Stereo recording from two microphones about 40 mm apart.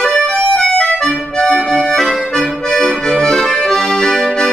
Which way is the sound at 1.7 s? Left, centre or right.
Centre.